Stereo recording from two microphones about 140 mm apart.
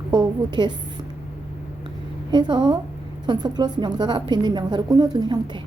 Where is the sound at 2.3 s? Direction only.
30° right (ahead or behind).